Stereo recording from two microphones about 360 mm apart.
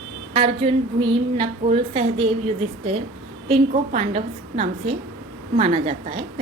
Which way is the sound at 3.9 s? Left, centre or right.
Centre.